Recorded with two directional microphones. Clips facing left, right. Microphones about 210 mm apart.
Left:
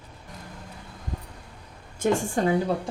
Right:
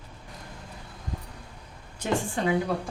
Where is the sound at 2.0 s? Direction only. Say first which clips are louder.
Left 4 dB; 40° left (ahead or behind).